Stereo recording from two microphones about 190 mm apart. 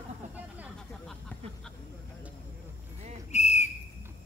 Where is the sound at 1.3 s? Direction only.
10° left (ahead or behind).